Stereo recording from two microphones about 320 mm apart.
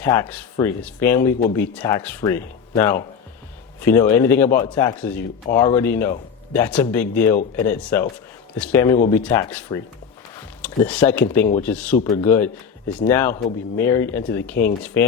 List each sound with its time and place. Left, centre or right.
0.0 s a man's voice: centre
7.3 s speech: left
7.7 s a man's voice: centre